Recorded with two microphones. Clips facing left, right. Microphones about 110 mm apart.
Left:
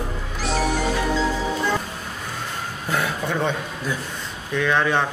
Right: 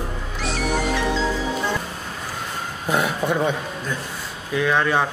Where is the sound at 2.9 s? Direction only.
15° right (ahead or behind).